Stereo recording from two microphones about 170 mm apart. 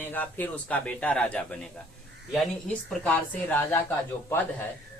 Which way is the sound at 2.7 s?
10° left (ahead or behind).